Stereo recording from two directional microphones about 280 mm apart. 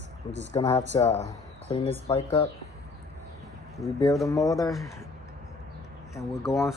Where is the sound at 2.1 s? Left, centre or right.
Left.